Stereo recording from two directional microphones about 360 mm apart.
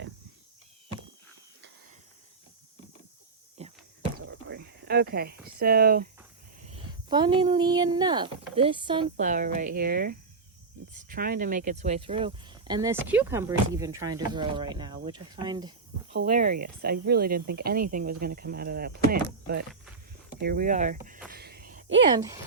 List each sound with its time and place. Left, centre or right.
3.6 s a sound: centre
4.3 s a sound: right
7.1 s speech: centre
16.1 s speech: right
21.3 s gasp: right
22.1 s speech: centre